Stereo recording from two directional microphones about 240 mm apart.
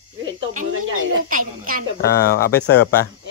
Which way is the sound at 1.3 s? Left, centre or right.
Right.